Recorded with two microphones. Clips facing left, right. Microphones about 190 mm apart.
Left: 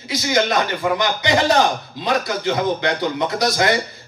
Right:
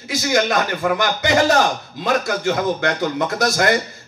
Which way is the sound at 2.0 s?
50° right (ahead or behind).